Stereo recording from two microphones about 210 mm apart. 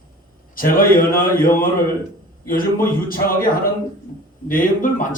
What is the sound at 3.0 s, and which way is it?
Speech, 45° left (ahead or behind).